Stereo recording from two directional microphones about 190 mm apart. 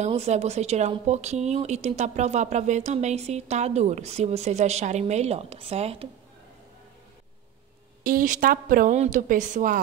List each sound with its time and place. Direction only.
0.0 s speech: 35° right (ahead or behind)
8.0 s a woman's voice: 45° right (ahead or behind)